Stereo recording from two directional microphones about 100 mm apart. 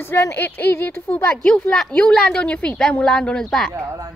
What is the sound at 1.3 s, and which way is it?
A woman's voice, 10° left (ahead or behind).